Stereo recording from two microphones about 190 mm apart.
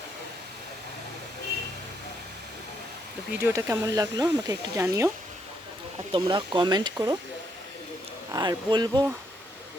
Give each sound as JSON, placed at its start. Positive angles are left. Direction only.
{"t": 3.4, "sound": "speech", "side_deg": -15}
{"t": 8.3, "sound": "speech", "side_deg": -20}